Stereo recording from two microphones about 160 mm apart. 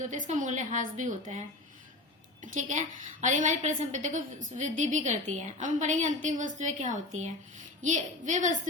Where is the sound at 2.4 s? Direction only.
55° right (ahead or behind).